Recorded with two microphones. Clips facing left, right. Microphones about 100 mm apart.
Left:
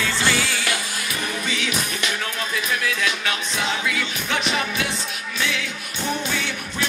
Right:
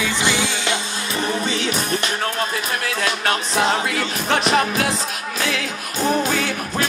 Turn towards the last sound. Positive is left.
turn(degrees=-40)  # may be behind; listen again after turning